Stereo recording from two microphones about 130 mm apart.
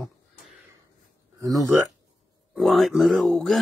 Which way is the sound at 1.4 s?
25° right (ahead or behind).